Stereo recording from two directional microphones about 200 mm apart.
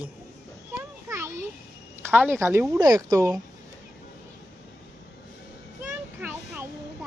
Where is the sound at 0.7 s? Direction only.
10° right (ahead or behind).